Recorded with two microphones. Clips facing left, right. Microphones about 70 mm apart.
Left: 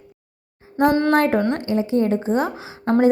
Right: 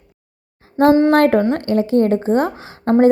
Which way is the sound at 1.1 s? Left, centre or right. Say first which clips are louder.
Right 4 dB; right.